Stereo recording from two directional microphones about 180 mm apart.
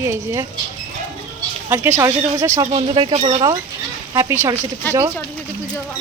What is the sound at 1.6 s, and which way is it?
Speech, 15° right (ahead or behind).